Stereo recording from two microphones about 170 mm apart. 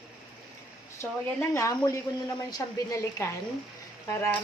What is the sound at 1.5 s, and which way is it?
Speech, 15° left (ahead or behind).